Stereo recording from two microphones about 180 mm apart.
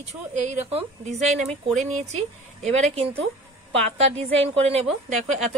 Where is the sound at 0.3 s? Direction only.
40° right (ahead or behind).